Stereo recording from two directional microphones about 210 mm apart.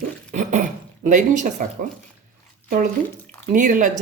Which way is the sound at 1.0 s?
35° right (ahead or behind).